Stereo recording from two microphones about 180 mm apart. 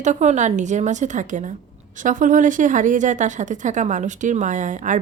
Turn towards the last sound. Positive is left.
turn(degrees=-45)  # may be behind; listen again after turning